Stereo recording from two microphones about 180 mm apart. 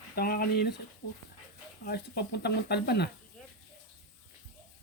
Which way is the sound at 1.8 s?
65° left (ahead or behind).